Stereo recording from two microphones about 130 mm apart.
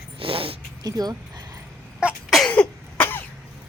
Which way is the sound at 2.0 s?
Centre (ahead or behind).